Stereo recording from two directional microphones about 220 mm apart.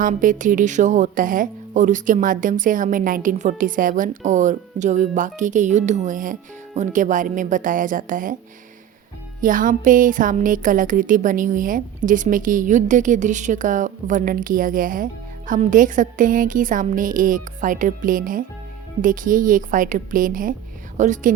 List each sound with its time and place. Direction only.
0.0 s a woman's voice: 35° right (ahead or behind)
9.4 s a woman's voice: 35° right (ahead or behind)